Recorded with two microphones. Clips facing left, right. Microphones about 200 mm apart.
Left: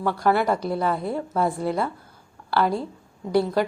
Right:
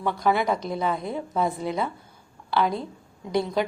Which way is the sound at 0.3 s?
5° left (ahead or behind).